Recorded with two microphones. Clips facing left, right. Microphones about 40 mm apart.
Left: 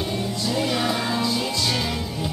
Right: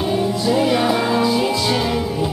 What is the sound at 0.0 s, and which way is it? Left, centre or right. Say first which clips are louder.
Music: right 7 dB; centre.